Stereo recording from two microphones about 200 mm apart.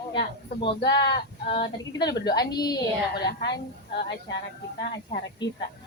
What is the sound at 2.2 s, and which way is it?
Speech, 20° left (ahead or behind).